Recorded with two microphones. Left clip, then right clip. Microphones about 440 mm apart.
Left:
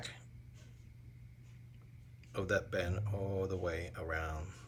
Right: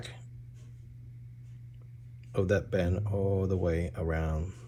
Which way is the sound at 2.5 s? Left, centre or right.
Centre.